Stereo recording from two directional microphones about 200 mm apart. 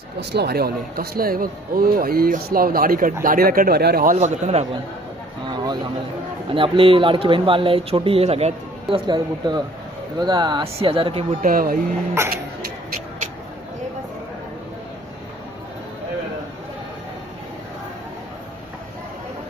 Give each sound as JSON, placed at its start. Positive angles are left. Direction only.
{"t": 0.2, "sound": "speech", "side_deg": -55}
{"t": 5.5, "sound": "a sound", "side_deg": -20}
{"t": 6.5, "sound": "speech", "side_deg": -25}
{"t": 11.4, "sound": "speech", "side_deg": -45}